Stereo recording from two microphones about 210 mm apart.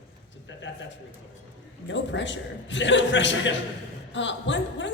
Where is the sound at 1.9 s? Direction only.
60° left (ahead or behind).